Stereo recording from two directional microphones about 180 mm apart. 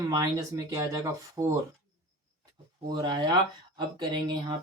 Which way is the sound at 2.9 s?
25° right (ahead or behind).